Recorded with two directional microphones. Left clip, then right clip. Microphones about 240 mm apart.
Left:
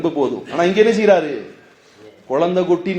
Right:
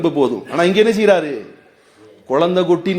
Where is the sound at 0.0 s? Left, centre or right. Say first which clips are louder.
Right 3 dB; right.